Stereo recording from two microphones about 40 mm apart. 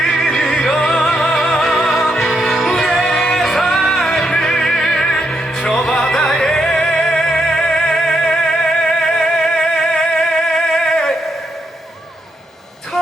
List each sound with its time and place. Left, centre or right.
0.0 s music: centre
0.4 s music: left
1.6 s music: centre